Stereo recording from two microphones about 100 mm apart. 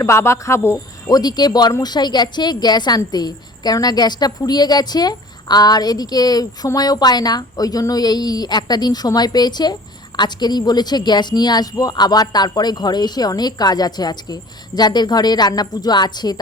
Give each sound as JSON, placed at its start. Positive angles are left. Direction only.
{"t": 0.0, "sound": "a man's voice", "side_deg": 25}
{"t": 1.1, "sound": "a woman's voice", "side_deg": 40}